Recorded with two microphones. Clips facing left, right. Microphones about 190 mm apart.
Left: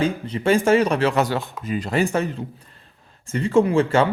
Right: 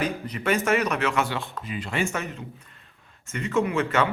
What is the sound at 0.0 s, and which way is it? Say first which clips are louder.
A man's voice: left 6 dB; 30° left (ahead or behind).